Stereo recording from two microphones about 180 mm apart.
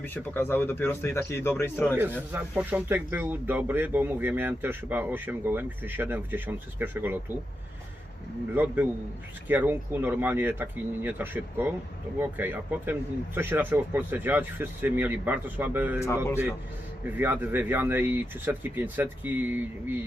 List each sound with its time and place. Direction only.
0.0 s speech: 10° left (ahead or behind)
2.0 s speech: 10° right (ahead or behind)
8.5 s speech: 10° right (ahead or behind)
16.0 s speech: 15° left (ahead or behind)
17.2 s speech: 10° right (ahead or behind)